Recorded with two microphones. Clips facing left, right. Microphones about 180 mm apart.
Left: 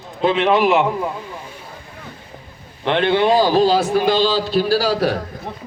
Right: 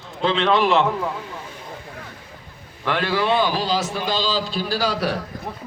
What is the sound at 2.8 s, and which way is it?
A man's voice, 25° left (ahead or behind).